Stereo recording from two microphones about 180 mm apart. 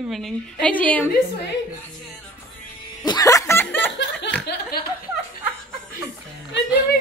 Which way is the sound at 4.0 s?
75° left (ahead or behind).